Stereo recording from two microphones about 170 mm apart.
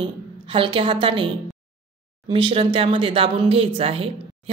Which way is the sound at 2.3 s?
30° right (ahead or behind).